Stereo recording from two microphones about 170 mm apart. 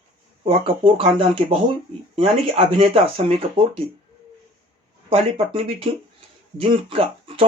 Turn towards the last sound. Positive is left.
turn(degrees=-30)  # may be behind; listen again after turning